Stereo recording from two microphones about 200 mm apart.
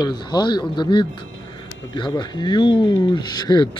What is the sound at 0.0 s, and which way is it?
Speech, 20° left (ahead or behind).